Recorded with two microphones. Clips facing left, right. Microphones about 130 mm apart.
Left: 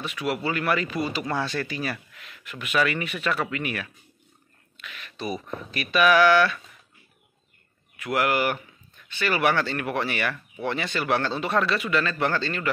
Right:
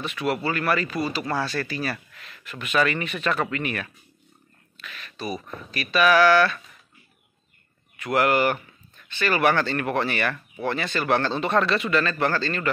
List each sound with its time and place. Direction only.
0.0 s speech: 10° left (ahead or behind)
8.0 s speech: 5° left (ahead or behind)